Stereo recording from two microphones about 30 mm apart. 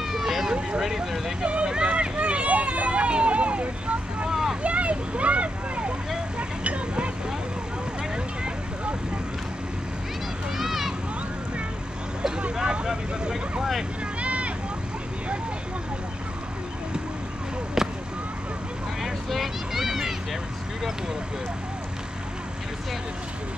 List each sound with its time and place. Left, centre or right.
0.0 s vehicle: centre
0.7 s speech: centre
1.4 s speech: right
1.7 s run: right
2.9 s vehicle: right
4.3 s vehicle: centre
4.6 s a sound: right
6.3 s vehicle: right
10.6 s a sound: centre
12.8 s speech: centre
14.2 s vehicle: right
17.8 s a sound: centre
19.2 s a sound: centre